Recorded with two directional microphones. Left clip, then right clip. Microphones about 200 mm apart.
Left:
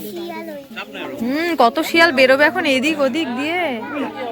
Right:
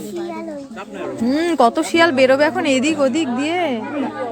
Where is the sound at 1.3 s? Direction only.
10° right (ahead or behind).